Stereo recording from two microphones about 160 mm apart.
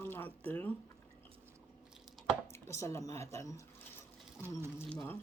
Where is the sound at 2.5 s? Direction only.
20° left (ahead or behind).